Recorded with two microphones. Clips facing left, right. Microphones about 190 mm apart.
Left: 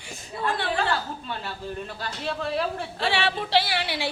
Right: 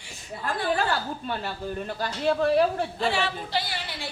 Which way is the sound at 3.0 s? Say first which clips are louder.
Left 4 dB; 75° left (ahead or behind).